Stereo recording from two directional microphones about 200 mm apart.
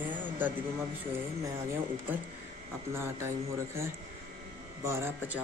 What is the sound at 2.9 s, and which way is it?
Speech, 10° right (ahead or behind).